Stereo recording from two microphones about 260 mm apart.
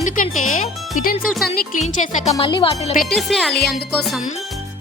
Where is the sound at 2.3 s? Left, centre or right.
Centre.